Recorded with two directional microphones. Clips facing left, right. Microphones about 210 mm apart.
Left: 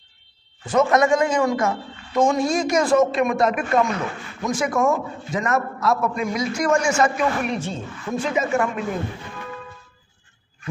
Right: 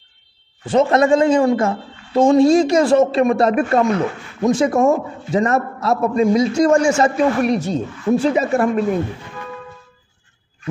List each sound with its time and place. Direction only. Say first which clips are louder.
0.7 s a man's voice: right 4 dB; 30° right (ahead or behind)